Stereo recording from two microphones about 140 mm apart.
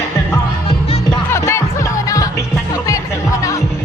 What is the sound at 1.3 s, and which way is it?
Music, 20° left (ahead or behind).